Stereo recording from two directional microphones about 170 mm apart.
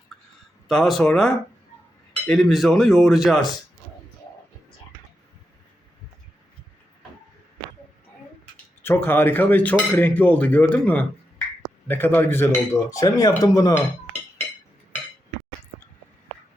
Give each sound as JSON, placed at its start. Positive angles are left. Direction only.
{"t": 0.7, "sound": "speech", "side_deg": 0}
{"t": 8.8, "sound": "speech", "side_deg": 10}